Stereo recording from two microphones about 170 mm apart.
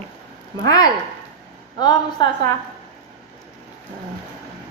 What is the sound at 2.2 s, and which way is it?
Speech, 25° left (ahead or behind).